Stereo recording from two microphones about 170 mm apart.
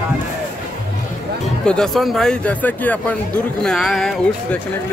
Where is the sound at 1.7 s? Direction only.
Centre (ahead or behind).